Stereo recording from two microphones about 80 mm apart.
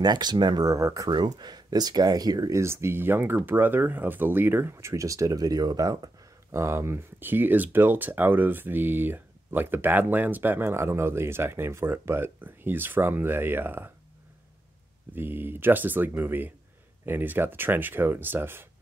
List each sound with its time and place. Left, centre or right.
0.0 s speech: right
0.7 s speech: right
1.3 s speech: right
2.5 s speech: right
6.5 s speech: right
15.1 s speech: right